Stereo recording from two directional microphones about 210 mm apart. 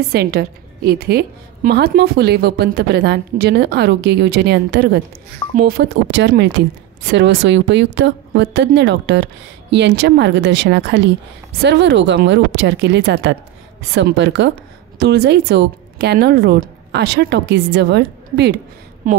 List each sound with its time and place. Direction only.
0.1 s a woman's voice: 50° right (ahead or behind)
19.1 s a woman's voice: 35° right (ahead or behind)